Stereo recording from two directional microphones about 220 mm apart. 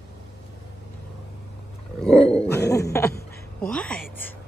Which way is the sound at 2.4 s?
50° left (ahead or behind).